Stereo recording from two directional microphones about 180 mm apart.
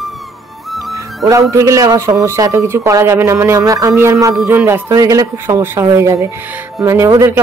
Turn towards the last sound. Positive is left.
turn(degrees=-15)  # may be behind; listen again after turning